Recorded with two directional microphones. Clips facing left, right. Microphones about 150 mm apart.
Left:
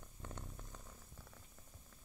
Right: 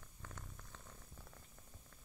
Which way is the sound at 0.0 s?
25° left (ahead or behind).